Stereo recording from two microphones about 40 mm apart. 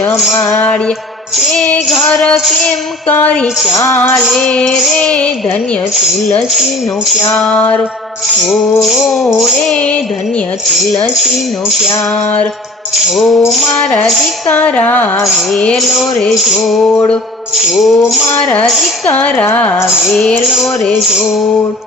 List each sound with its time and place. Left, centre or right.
3.1 s music: left
4.4 s music: left
8.9 s music: centre
13.1 s music: centre
14.6 s music: left
16.3 s music: centre
18.3 s a woman's voice: left
20.0 s music: centre